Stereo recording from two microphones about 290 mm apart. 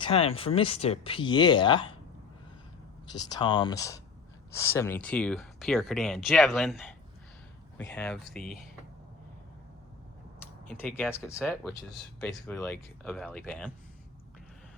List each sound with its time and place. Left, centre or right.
0.0 s speech: centre
3.1 s speech: centre
7.9 s speech: centre
10.4 s speech: centre